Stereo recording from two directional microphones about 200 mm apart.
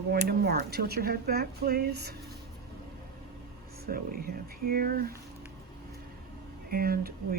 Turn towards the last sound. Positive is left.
turn(degrees=-50)  # may be behind; listen again after turning